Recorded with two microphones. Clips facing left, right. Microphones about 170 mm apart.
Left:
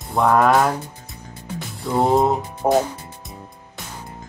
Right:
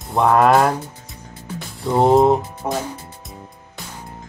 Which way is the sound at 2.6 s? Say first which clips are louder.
Left 8 dB; 45° left (ahead or behind).